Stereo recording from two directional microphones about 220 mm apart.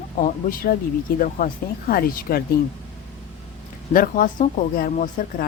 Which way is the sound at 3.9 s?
40° left (ahead or behind).